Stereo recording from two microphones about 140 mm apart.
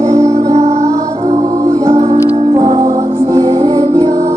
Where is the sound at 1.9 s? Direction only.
45° right (ahead or behind); by 4.3 s 25° right (ahead or behind).